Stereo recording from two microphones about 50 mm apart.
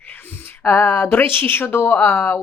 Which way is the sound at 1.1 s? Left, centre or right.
Left.